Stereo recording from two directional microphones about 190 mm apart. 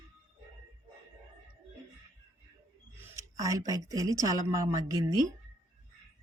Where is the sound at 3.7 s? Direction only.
20° right (ahead or behind).